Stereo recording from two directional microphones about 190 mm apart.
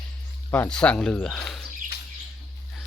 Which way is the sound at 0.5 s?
10° left (ahead or behind).